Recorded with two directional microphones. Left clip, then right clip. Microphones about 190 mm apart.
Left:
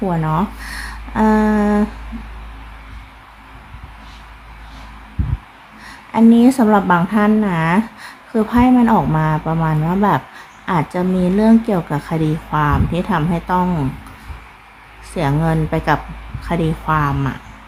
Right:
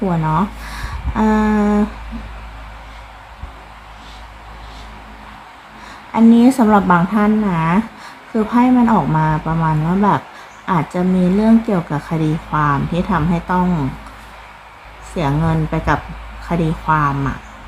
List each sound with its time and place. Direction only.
0.1 s speech: 15° left (ahead or behind)
6.1 s speech: 10° left (ahead or behind)
15.1 s speech: 15° left (ahead or behind)